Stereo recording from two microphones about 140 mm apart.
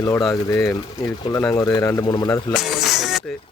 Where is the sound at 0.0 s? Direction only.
25° left (ahead or behind).